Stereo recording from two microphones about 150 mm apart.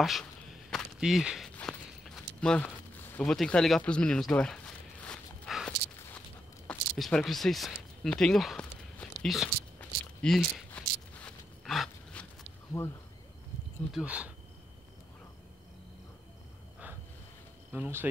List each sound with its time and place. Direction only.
0.0 s a sound: centre (ahead or behind)
5.7 s walk: 15° left (ahead or behind)
7.0 s speech: 5° left (ahead or behind)
9.8 s walk: 5° left (ahead or behind)
12.8 s speech: 20° left (ahead or behind)
13.9 s speech: 10° right (ahead or behind)
17.7 s speech: 15° right (ahead or behind)